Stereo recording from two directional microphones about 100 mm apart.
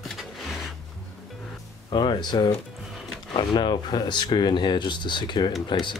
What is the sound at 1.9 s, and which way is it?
Speech, 50° left (ahead or behind).